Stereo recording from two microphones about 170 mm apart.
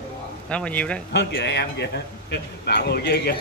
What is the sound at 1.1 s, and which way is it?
A man's voice, 70° left (ahead or behind).